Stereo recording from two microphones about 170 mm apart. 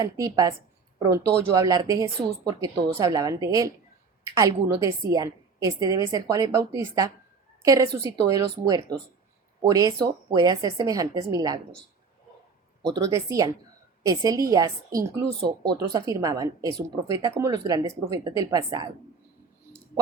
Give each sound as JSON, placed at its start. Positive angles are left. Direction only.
{"t": 0.0, "sound": "a woman's voice", "side_deg": -20}
{"t": 13.0, "sound": "a woman's voice", "side_deg": -20}